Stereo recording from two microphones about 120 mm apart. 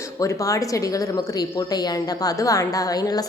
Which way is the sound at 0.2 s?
30° left (ahead or behind).